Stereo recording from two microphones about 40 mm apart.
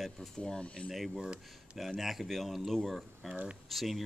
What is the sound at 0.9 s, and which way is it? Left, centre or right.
Speech, centre.